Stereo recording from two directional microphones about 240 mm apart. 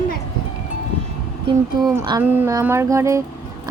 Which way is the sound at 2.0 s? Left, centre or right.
Centre.